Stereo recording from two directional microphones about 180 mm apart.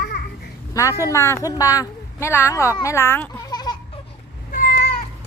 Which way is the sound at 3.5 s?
25° left (ahead or behind).